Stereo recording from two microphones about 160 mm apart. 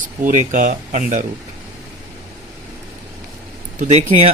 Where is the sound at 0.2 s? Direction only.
55° right (ahead or behind).